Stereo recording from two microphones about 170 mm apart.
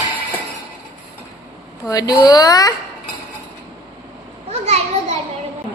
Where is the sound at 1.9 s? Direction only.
20° left (ahead or behind).